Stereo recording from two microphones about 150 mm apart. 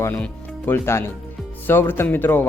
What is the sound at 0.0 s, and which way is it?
Speech, 10° left (ahead or behind).